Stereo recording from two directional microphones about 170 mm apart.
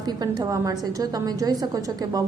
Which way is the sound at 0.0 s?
20° right (ahead or behind).